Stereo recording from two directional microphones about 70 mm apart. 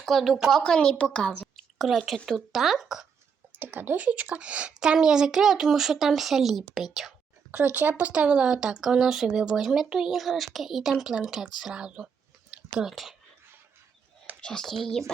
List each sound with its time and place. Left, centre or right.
0.0 s speech: centre
0.6 s a woman's voice: centre
2.0 s speech: centre
3.6 s speech: right; by 7.1 s centre
7.5 s speech: right; by 11.5 s centre
11.6 s a sound: centre
12.9 s speech: centre
14.4 s speech: centre